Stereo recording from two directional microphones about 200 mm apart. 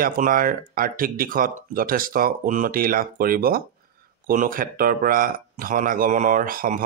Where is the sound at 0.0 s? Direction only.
45° right (ahead or behind).